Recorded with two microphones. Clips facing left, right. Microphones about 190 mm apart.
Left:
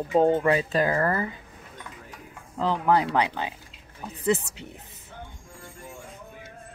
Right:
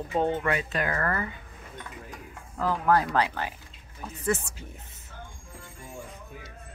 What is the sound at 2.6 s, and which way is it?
Speech, 20° left (ahead or behind).